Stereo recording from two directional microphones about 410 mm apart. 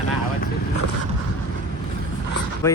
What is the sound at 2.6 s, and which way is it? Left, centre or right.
Speech, centre.